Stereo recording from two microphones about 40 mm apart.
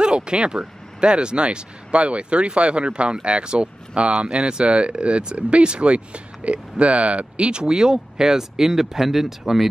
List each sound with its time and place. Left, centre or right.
0.0 s speech: right
7.7 s speech: centre